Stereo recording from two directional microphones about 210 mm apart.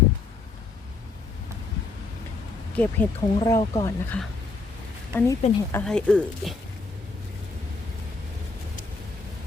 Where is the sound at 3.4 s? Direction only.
20° left (ahead or behind).